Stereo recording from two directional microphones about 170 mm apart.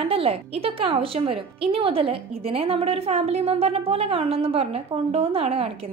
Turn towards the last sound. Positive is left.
turn(degrees=-35)  # may be behind; listen again after turning